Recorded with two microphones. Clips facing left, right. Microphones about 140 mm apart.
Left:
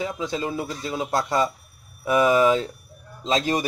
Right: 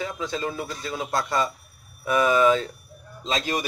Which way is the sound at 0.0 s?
20° left (ahead or behind).